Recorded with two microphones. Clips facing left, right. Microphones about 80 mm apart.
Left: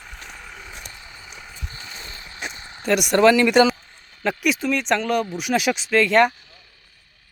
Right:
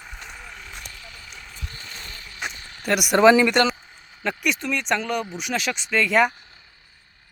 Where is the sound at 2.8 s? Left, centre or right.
Centre.